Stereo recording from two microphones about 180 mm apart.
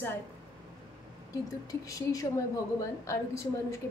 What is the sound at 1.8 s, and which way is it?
A woman's voice, 20° left (ahead or behind).